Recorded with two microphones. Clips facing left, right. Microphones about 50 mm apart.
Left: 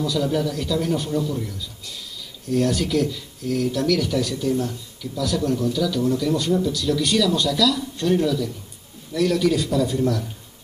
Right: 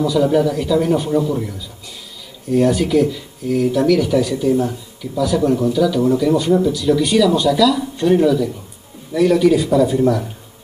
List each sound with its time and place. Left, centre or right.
0.0 s speech: centre